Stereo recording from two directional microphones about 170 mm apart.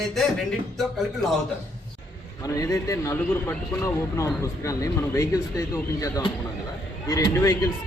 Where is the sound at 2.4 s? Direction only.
20° left (ahead or behind).